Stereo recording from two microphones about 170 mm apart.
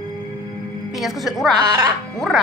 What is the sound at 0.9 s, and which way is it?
Speech, centre (ahead or behind).